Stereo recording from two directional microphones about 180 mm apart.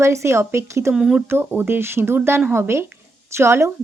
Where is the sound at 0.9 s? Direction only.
5° right (ahead or behind).